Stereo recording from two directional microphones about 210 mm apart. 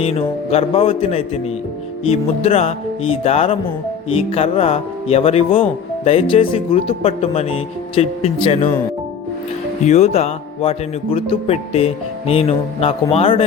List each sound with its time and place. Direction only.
0.0 s a man's voice: 30° left (ahead or behind)
9.8 s a man's voice: 30° left (ahead or behind)